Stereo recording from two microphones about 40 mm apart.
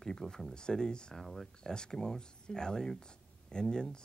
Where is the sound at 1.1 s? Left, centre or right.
Centre.